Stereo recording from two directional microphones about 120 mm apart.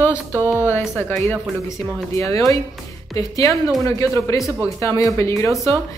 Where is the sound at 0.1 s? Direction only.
15° right (ahead or behind).